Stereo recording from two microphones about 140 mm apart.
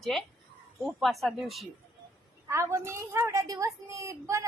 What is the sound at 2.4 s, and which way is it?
A woman's voice, 20° right (ahead or behind).